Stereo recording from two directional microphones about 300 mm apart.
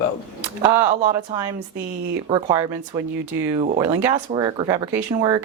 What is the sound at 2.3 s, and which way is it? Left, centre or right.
Speech, centre.